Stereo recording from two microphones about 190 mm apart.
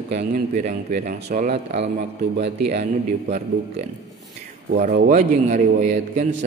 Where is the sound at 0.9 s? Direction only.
40° right (ahead or behind).